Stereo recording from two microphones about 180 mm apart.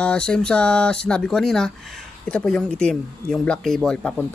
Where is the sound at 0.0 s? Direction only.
5° left (ahead or behind).